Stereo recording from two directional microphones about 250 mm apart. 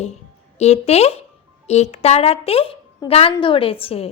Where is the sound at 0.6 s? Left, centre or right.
Left.